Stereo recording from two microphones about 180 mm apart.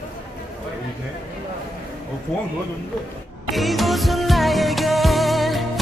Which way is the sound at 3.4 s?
Centre (ahead or behind).